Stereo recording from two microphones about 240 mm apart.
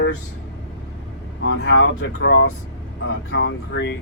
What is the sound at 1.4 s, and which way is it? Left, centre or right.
Speech, left.